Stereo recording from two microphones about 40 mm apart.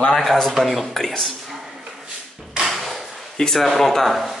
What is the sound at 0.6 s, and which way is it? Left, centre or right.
Speech, centre.